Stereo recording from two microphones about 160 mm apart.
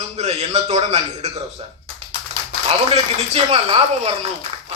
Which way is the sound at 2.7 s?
40° right (ahead or behind).